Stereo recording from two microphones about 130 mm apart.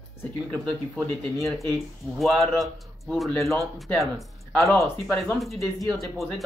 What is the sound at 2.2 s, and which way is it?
Speech, centre (ahead or behind).